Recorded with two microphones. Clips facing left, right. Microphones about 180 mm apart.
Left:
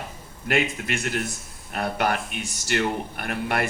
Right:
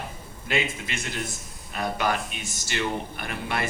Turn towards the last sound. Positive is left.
turn(degrees=60)  # may be behind; listen again after turning